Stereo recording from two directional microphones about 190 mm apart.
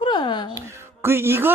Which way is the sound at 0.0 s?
25° left (ahead or behind).